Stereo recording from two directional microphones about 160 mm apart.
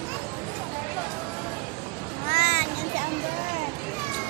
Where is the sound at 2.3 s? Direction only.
60° right (ahead or behind).